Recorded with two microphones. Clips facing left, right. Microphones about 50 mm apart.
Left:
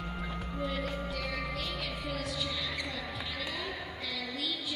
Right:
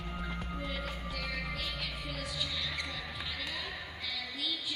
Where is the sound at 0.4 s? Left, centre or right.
Centre.